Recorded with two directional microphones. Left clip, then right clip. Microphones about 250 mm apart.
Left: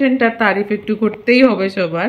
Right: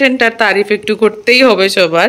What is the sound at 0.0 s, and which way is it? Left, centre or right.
Speech, centre.